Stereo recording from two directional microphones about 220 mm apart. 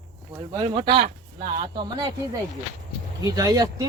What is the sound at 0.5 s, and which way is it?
Speech, 20° right (ahead or behind).